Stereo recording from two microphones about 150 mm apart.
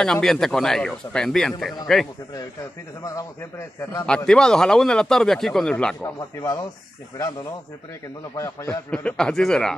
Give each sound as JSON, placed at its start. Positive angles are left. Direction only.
{"t": 0.0, "sound": "speech", "side_deg": 5}
{"t": 3.0, "sound": "a man's voice", "side_deg": 20}
{"t": 4.0, "sound": "speech", "side_deg": 5}
{"t": 6.0, "sound": "a man's voice", "side_deg": 25}
{"t": 8.4, "sound": "a man's voice", "side_deg": 20}
{"t": 8.9, "sound": "speech", "side_deg": 5}